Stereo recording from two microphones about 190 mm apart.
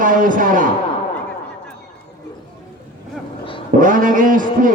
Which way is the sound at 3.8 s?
45° right (ahead or behind).